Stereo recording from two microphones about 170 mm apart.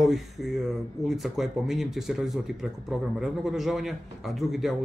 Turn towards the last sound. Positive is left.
turn(degrees=0)  # may be behind; listen again after turning